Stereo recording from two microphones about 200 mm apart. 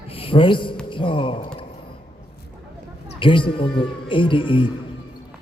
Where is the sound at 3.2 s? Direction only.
25° left (ahead or behind).